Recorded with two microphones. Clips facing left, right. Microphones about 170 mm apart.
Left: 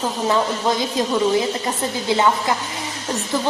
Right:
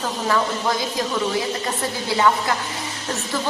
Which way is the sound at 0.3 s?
20° left (ahead or behind).